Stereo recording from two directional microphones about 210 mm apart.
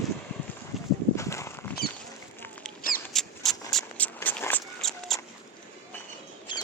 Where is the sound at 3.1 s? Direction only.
Centre (ahead or behind).